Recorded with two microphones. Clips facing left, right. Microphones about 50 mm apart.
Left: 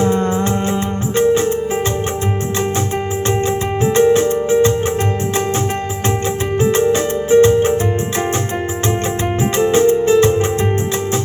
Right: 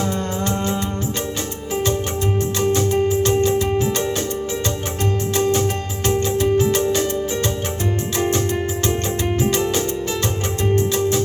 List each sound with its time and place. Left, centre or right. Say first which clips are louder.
3.2 s music: even; left
6.6 s music: left 4 dB; left
9.4 s music: left 9 dB; left